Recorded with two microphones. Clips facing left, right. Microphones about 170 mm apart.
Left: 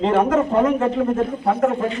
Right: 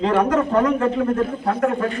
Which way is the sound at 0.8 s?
5° left (ahead or behind).